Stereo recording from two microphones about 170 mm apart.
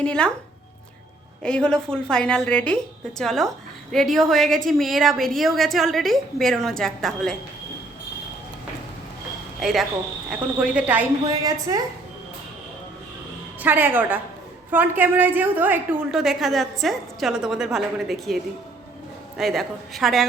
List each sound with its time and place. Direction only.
0.0 s a woman's voice: 5° left (ahead or behind)
1.4 s a woman's voice: 5° left (ahead or behind)
9.6 s speech: centre (ahead or behind)
11.3 s a woman's voice: 20° right (ahead or behind)
13.6 s a woman's voice: 10° right (ahead or behind)
19.4 s a woman's voice: centre (ahead or behind)